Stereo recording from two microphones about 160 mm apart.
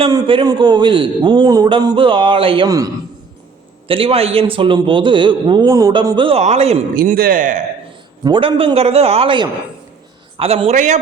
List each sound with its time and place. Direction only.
0.1 s a man's voice: 30° right (ahead or behind)
2.6 s a man's voice: 20° right (ahead or behind)
3.8 s a man's voice: 35° right (ahead or behind)
6.9 s speech: 65° right (ahead or behind)
8.2 s a man's voice: 30° right (ahead or behind); by 10.9 s 45° right (ahead or behind)